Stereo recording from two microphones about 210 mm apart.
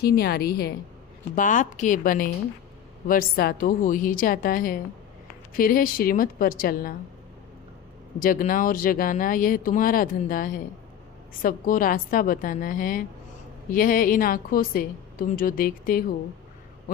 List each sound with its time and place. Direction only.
0.0 s a woman's voice: 50° left (ahead or behind)
1.4 s a woman's voice: 40° left (ahead or behind)
8.2 s a woman's voice: 40° left (ahead or behind)